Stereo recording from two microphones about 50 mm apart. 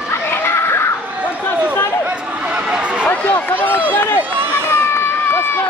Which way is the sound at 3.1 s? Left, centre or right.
Left.